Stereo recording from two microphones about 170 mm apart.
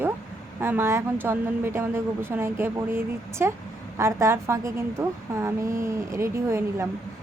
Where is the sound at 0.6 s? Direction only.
15° right (ahead or behind).